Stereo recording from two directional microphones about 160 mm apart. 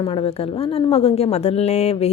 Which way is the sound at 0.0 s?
35° left (ahead or behind).